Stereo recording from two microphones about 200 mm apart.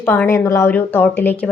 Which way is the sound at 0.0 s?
10° left (ahead or behind).